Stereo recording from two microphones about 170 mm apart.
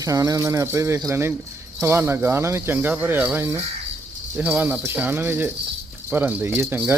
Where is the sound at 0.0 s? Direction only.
20° right (ahead or behind).